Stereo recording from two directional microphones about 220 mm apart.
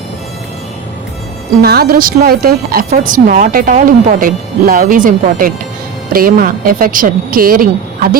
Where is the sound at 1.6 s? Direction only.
45° right (ahead or behind).